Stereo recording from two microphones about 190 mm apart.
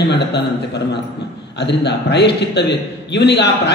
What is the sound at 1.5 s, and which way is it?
A man's voice, 65° left (ahead or behind).